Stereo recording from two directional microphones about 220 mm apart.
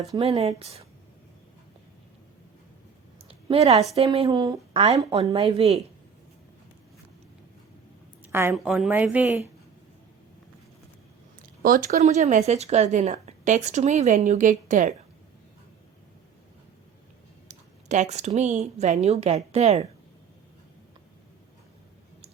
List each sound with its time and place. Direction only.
0.1 s a woman's voice: 25° right (ahead or behind)
3.2 s a sound: 25° right (ahead or behind)
3.9 s a woman's voice: 25° right (ahead or behind)
8.3 s a woman's voice: 10° right (ahead or behind)
11.6 s speech: 40° right (ahead or behind)
17.5 s a woman's voice: 30° right (ahead or behind)